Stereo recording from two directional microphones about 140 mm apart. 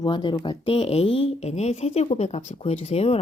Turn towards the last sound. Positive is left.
turn(degrees=45)  # may be behind; listen again after turning